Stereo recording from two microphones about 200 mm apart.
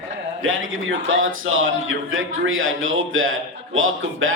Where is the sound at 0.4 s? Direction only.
80° right.